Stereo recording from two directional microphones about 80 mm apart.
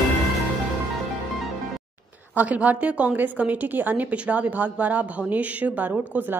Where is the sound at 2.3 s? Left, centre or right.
Centre.